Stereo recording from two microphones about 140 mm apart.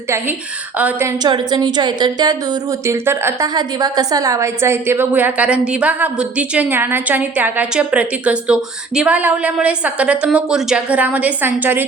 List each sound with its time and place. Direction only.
0.8 s a woman's voice: 10° right (ahead or behind)
1.0 s a woman's voice: 30° right (ahead or behind)
3.5 s a woman's voice: 30° right (ahead or behind)